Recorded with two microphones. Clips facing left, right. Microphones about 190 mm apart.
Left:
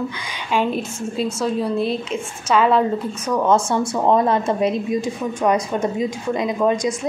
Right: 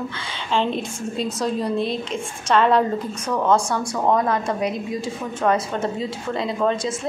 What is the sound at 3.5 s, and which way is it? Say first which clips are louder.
A woman's voice: left 2 dB; 20° left (ahead or behind).